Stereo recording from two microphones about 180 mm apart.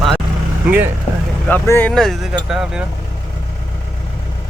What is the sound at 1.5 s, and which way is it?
Speech, 10° left (ahead or behind).